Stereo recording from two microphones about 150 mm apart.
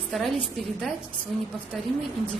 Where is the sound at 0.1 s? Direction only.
Centre (ahead or behind).